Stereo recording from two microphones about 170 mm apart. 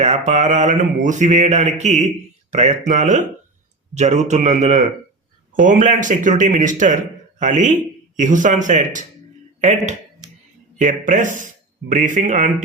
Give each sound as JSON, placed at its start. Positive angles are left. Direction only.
{"t": 0.0, "sound": "speech", "side_deg": -40}